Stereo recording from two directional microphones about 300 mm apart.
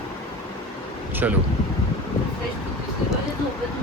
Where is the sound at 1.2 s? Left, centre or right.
Centre.